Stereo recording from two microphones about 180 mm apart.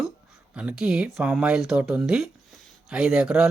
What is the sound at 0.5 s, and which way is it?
Speech, 5° right (ahead or behind).